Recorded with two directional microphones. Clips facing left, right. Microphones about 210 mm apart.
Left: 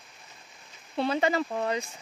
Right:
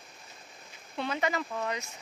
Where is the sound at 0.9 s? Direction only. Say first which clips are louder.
Left 5 dB; 30° left (ahead or behind).